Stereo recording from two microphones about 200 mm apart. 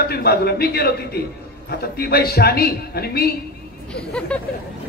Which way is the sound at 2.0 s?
50° left (ahead or behind).